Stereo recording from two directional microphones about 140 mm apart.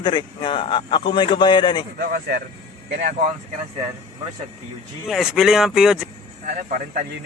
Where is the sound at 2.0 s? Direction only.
90° right.